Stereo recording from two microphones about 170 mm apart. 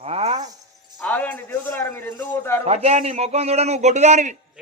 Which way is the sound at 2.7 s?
40° right (ahead or behind).